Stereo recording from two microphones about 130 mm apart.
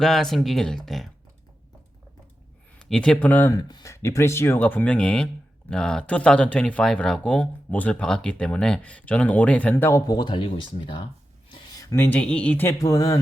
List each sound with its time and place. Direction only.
0.0 s speech: centre (ahead or behind)
2.7 s speech: 5° left (ahead or behind)
3.5 s speech: 30° left (ahead or behind)
10.1 s speech: 35° left (ahead or behind)
11.9 s speech: 15° left (ahead or behind)
12.8 s speech: 25° left (ahead or behind)